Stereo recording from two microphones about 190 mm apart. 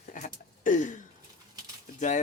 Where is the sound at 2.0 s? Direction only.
40° left (ahead or behind).